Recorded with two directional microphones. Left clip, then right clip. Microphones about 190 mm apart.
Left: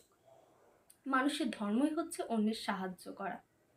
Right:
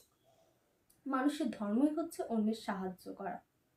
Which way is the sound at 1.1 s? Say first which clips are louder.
Left 2 dB; 5° right (ahead or behind).